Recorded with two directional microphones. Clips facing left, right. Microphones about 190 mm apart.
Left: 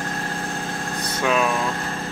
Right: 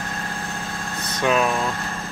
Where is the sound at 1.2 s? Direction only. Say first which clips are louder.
Right 1 dB; centre (ahead or behind).